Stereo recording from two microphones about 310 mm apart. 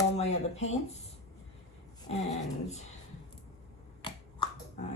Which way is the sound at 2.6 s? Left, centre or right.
Left.